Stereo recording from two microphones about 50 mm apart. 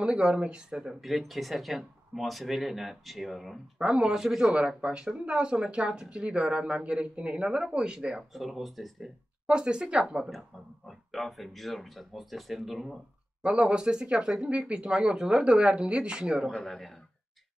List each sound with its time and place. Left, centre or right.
0.0 s speech: centre
1.0 s speech: centre
3.7 s speech: centre
8.3 s speech: centre
9.5 s speech: centre
10.9 s speech: centre
13.4 s speech: right
16.5 s speech: centre